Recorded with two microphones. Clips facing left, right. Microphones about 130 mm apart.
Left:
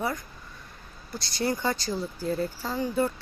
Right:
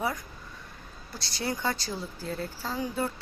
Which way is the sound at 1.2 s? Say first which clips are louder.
Left 3 dB; centre (ahead or behind).